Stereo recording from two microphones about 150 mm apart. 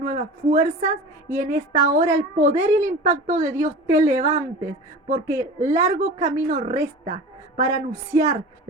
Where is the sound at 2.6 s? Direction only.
15° right (ahead or behind).